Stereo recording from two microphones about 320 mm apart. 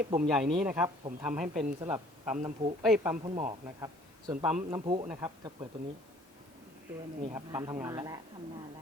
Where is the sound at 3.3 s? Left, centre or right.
Centre.